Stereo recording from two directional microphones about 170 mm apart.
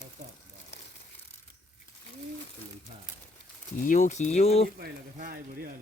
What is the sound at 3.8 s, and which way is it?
Speech, 50° left (ahead or behind).